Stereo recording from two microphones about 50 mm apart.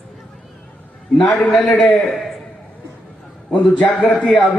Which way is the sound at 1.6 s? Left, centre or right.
Centre.